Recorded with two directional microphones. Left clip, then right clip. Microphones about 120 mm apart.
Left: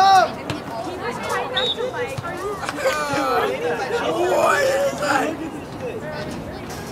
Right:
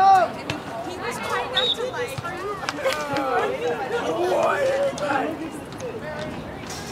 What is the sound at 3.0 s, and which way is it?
Chatter, 40° left (ahead or behind).